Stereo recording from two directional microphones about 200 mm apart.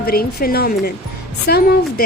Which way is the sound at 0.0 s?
50° left (ahead or behind).